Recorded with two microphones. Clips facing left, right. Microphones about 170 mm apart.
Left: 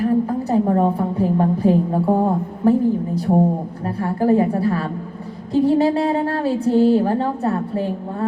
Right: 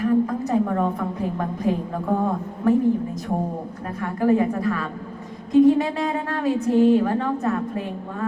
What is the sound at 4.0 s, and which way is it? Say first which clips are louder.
A woman's voice: left 3 dB; 30° left (ahead or behind).